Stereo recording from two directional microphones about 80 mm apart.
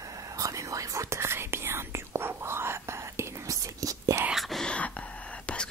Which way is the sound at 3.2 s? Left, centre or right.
Right.